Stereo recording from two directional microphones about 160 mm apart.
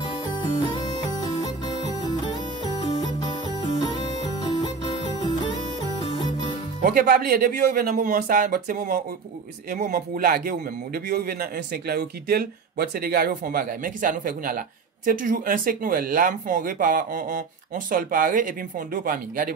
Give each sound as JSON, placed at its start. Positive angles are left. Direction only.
{"t": 0.3, "sound": "music", "side_deg": 25}
{"t": 6.8, "sound": "speech", "side_deg": -60}